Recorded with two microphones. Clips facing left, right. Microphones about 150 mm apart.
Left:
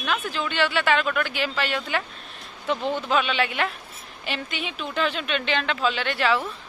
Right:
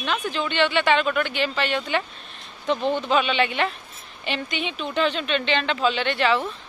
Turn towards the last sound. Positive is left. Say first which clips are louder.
# right 2 dB
turn(degrees=5)  # may be behind; listen again after turning